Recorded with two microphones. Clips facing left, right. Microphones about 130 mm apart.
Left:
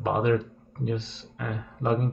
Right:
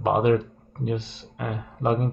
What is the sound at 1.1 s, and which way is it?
Speech, 60° right (ahead or behind).